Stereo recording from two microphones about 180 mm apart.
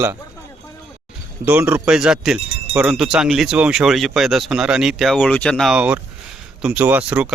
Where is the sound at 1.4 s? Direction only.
10° right (ahead or behind).